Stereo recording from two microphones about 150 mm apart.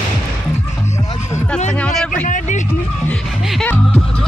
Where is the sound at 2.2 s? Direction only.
55° left (ahead or behind).